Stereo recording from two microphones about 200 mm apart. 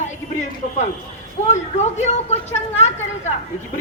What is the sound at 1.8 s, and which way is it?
A woman's voice, 35° left (ahead or behind).